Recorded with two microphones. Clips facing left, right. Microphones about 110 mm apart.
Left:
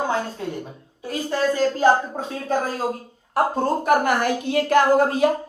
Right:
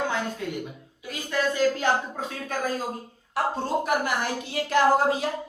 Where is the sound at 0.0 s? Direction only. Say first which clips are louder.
Left 4 dB; 30° left (ahead or behind).